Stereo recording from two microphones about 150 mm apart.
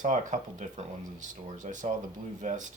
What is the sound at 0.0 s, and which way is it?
Speech, 55° right (ahead or behind).